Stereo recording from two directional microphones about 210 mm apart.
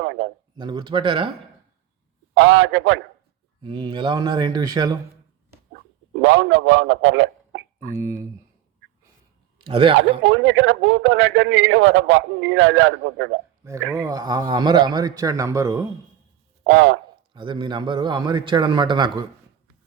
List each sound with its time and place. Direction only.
0.0 s a sound: 60° right (ahead or behind)
0.5 s a man's voice: 20° right (ahead or behind)
2.3 s a man's voice: 80° right
3.6 s a man's voice: 20° right (ahead or behind)
6.2 s a man's voice: 70° right (ahead or behind)
7.9 s a man's voice: 15° right (ahead or behind)
9.6 s a man's voice: 25° right (ahead or behind)
10.2 s a man's voice: 65° right (ahead or behind)
13.7 s a man's voice: 15° right (ahead or behind)
16.6 s a man's voice: 75° right (ahead or behind)
17.3 s a man's voice: 20° right (ahead or behind)